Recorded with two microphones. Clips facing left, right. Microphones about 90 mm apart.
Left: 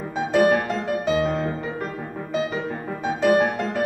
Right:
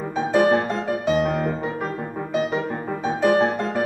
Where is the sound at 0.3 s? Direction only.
20° right (ahead or behind).